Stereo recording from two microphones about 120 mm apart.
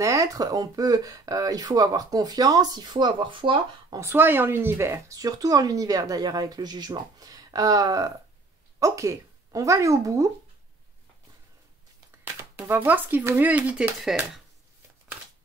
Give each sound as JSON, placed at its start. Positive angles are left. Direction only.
{"t": 0.0, "sound": "speech", "side_deg": -25}
{"t": 3.9, "sound": "speech", "side_deg": -20}
{"t": 12.5, "sound": "speech", "side_deg": -15}
{"t": 14.0, "sound": "speech", "side_deg": 0}